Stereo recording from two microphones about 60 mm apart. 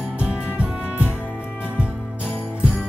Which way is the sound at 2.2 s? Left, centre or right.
Left.